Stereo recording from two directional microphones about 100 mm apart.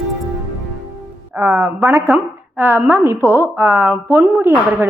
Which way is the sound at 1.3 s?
20° right (ahead or behind).